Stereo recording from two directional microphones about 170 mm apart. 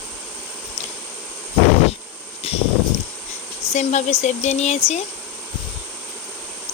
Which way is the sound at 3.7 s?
40° left (ahead or behind).